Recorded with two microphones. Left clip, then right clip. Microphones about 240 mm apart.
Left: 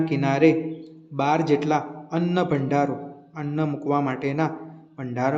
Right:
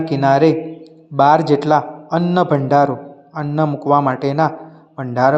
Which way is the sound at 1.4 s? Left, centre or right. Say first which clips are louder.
Right 8 dB; right.